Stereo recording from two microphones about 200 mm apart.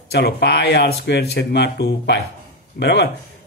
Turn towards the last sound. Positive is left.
turn(degrees=60)  # may be behind; listen again after turning